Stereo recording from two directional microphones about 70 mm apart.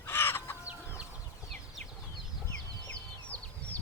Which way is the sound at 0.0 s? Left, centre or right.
Left.